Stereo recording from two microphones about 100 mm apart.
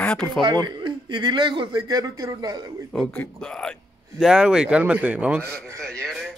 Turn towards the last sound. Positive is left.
turn(degrees=5)  # may be behind; listen again after turning